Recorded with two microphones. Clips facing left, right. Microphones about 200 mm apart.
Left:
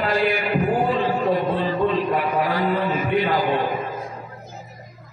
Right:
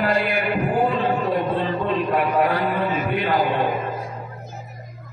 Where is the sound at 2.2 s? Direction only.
60° right (ahead or behind).